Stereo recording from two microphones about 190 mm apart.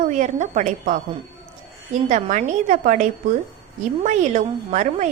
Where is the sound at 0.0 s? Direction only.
40° right (ahead or behind).